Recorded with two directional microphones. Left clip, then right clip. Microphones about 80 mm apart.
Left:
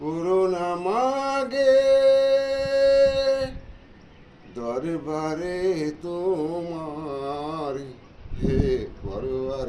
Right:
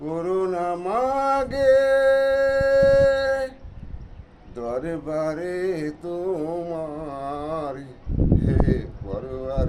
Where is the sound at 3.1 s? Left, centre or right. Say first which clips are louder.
Even; right.